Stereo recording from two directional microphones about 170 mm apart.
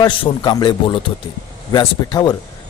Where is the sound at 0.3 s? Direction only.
25° left (ahead or behind).